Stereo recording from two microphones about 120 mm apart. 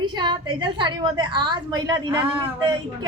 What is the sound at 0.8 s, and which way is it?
A woman's voice, 40° right (ahead or behind).